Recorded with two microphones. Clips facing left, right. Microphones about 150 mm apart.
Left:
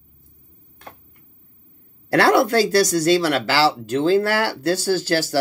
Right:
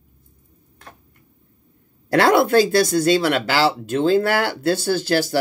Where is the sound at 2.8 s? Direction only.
40° left (ahead or behind).